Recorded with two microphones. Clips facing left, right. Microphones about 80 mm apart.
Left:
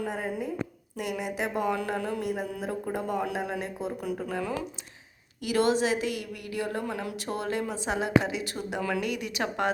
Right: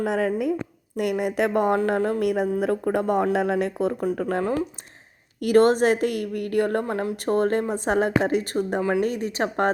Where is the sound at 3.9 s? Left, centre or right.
Right.